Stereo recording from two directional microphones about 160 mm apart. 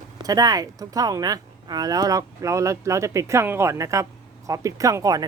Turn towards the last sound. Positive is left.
turn(degrees=-20)  # may be behind; listen again after turning